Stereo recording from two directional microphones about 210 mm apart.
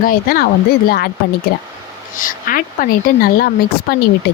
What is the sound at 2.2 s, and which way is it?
Speech, 40° left (ahead or behind).